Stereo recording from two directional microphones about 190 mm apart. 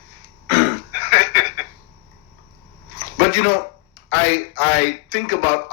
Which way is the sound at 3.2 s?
45° left (ahead or behind).